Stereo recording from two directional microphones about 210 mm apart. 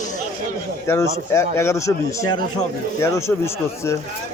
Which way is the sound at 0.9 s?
15° left (ahead or behind).